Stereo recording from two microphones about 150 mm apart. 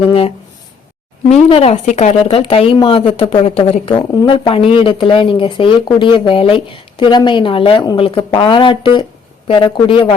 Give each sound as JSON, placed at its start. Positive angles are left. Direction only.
{"t": 0.1, "sound": "speech", "side_deg": 40}